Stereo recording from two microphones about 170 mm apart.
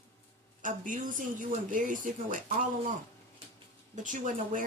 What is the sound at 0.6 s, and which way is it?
Speech, 50° right (ahead or behind).